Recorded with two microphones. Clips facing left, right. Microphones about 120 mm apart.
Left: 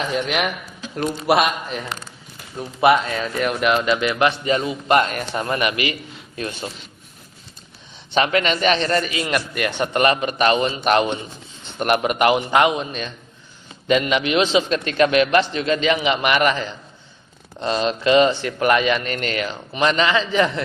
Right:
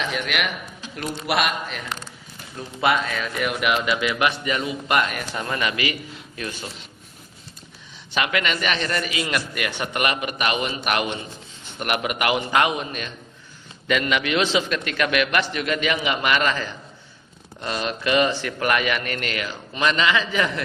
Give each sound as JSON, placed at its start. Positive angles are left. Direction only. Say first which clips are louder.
{"t": 0.2, "sound": "a man's voice", "louder": "left 4 dB", "side_deg": 35}
{"t": 2.6, "sound": "speech", "louder": "left 6 dB", "side_deg": 25}
{"t": 8.1, "sound": "a man's voice", "louder": "left 5 dB", "side_deg": 30}